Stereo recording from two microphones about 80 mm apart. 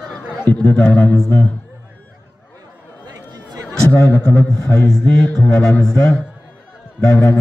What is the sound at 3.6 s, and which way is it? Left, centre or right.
Speech, left.